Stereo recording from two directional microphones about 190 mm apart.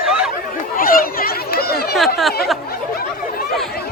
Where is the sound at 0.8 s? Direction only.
50° left (ahead or behind).